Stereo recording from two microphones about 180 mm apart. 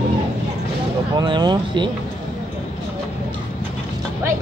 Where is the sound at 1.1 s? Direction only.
25° right (ahead or behind).